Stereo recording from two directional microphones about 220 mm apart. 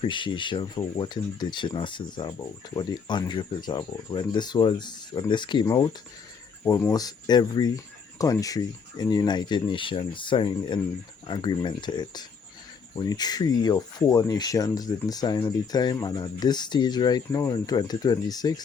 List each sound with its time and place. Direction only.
0.0 s speech: 20° left (ahead or behind)